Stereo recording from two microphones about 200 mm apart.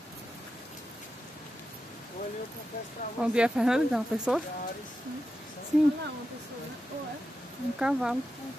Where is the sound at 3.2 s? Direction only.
5° right (ahead or behind).